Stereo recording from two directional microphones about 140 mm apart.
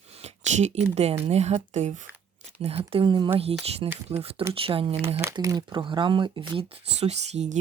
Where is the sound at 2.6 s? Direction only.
45° right (ahead or behind).